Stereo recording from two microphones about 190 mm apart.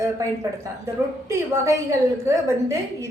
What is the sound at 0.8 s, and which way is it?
A woman's voice, 15° right (ahead or behind).